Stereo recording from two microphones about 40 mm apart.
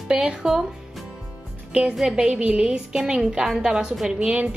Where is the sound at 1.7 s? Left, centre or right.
Right.